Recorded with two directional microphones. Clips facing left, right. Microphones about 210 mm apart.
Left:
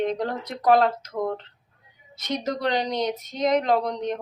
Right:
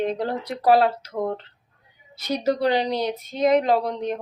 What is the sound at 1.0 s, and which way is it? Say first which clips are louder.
Speech: right 1 dB; 30° right (ahead or behind).